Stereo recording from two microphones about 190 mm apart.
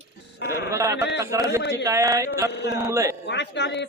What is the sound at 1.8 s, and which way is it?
Speech, 15° right (ahead or behind).